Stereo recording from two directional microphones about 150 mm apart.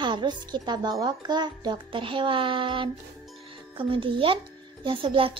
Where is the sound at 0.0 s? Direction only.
30° right (ahead or behind).